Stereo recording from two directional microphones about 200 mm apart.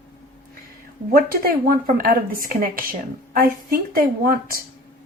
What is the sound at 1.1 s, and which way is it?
Speech, 45° right (ahead or behind).